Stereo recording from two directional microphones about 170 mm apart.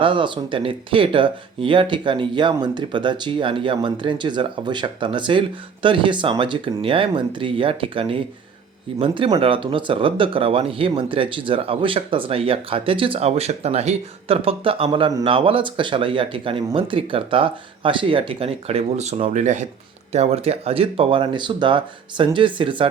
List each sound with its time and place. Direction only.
0.0 s speech: 30° right (ahead or behind)